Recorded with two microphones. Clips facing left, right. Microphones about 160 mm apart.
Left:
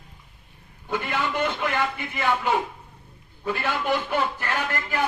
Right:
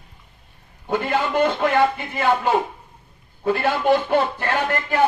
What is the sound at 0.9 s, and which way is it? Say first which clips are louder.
Speech: right 5 dB; 40° right (ahead or behind).